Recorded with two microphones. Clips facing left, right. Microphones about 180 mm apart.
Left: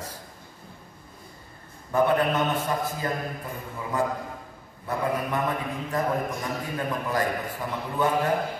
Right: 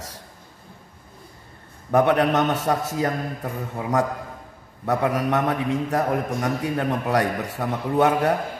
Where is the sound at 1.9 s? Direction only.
80° right.